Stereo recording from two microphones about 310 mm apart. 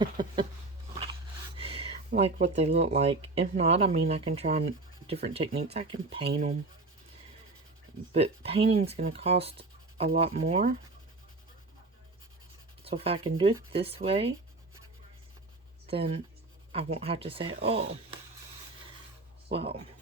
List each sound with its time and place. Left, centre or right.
0.0 s a sound: centre
1.5 s a sound: centre
2.0 s speech: right
8.1 s speech: centre
12.8 s speech: centre
15.9 s speech: centre
19.5 s speech: centre